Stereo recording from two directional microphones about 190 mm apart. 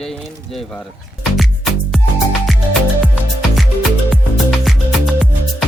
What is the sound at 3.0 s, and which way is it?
Music, centre (ahead or behind).